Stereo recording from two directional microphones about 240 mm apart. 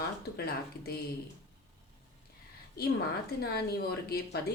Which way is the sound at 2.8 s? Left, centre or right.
Left.